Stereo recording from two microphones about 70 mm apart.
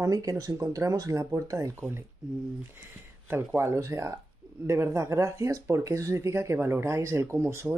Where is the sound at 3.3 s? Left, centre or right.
Right.